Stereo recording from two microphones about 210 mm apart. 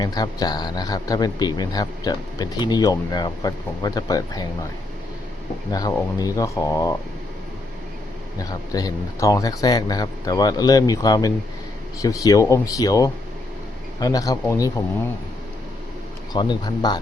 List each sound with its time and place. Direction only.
0.0 s speech: 20° left (ahead or behind)
5.7 s speech: 15° left (ahead or behind)
8.4 s speech: 15° left (ahead or behind)
16.3 s speech: 20° left (ahead or behind)